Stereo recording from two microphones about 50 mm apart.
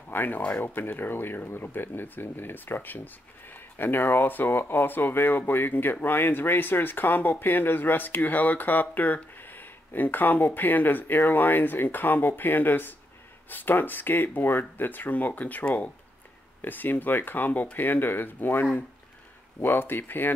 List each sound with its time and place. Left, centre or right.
0.1 s speech: left
16.6 s speech: left